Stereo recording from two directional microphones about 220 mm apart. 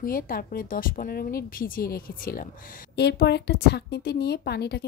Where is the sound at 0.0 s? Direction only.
40° left (ahead or behind).